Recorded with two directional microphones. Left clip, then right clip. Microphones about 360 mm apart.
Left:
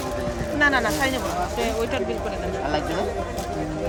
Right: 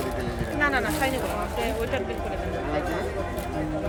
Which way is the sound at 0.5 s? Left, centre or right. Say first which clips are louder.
Left 4 dB; left.